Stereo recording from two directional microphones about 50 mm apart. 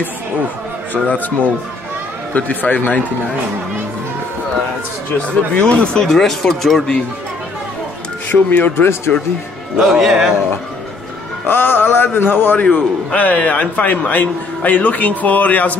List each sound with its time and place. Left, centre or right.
1.0 s a man's voice: left
5.3 s speech: left
5.9 s speech: centre
8.3 s a man's voice: left
9.8 s speech: centre
11.4 s a sound: left
12.5 s a man's voice: left